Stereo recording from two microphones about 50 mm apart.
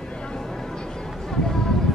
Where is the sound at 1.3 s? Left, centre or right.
Centre.